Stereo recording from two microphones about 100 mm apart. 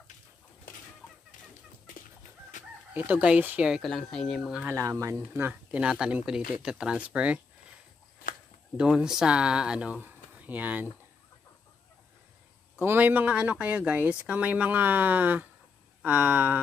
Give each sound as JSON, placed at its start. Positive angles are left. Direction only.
{"t": 2.9, "sound": "speech", "side_deg": -15}
{"t": 3.8, "sound": "speech", "side_deg": 5}
{"t": 4.5, "sound": "speech", "side_deg": -5}
{"t": 4.7, "sound": "speech", "side_deg": -30}
{"t": 8.7, "sound": "speech", "side_deg": -10}
{"t": 12.7, "sound": "speech", "side_deg": -20}